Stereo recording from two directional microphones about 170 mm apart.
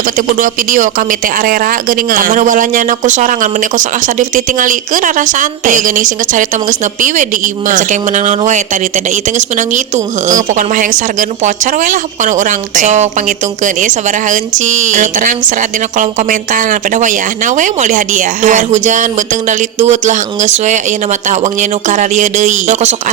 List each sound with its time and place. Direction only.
0.2 s speech: 55° right (ahead or behind)